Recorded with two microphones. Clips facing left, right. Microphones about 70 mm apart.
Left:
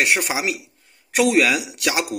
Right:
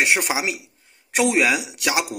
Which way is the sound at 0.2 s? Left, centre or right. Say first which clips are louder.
Even; centre.